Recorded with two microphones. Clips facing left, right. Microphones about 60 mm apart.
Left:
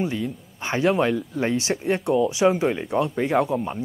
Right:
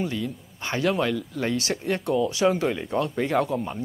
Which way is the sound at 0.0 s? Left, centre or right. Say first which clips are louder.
Left 2 dB; left.